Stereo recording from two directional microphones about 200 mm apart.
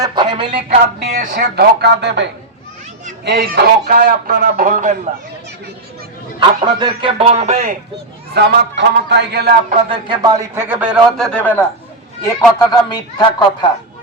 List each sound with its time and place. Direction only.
0.0 s a sound: 25° right (ahead or behind)
1.2 s a man's voice: 45° right (ahead or behind)
3.2 s a man's voice: 50° right (ahead or behind)
6.7 s speech: 20° right (ahead or behind); by 7.8 s 35° right (ahead or behind)
8.3 s a man's voice: 55° right (ahead or behind)
9.6 s speech: 25° right (ahead or behind); by 11.6 s 5° left (ahead or behind)
12.5 s a man's voice: 20° left (ahead or behind)